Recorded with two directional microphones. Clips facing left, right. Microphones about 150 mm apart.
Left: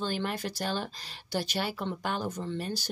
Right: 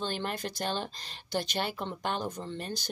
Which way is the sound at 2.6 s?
10° left (ahead or behind).